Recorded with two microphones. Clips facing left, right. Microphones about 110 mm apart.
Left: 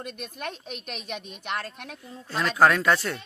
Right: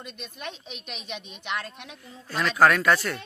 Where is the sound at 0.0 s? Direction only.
50° left (ahead or behind).